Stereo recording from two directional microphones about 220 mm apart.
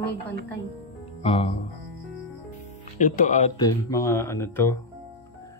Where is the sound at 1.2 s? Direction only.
25° left (ahead or behind).